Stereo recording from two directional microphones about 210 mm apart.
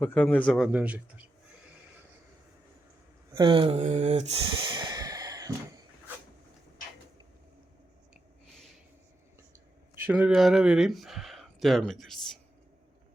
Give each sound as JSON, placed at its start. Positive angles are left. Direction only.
{"t": 0.0, "sound": "speech", "side_deg": 5}
{"t": 3.3, "sound": "speech", "side_deg": -25}
{"t": 8.1, "sound": "a sound", "side_deg": 0}
{"t": 9.9, "sound": "speech", "side_deg": -10}